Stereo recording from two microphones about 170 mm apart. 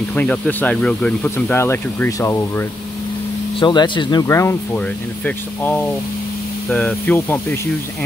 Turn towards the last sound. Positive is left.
turn(degrees=10)  # may be behind; listen again after turning